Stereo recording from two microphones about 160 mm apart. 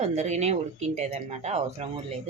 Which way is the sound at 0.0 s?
45° right (ahead or behind).